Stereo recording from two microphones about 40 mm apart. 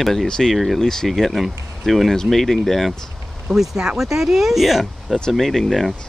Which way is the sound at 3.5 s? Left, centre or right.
Centre.